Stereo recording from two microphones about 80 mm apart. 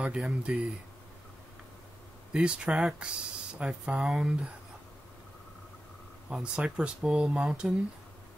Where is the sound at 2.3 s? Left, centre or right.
Centre.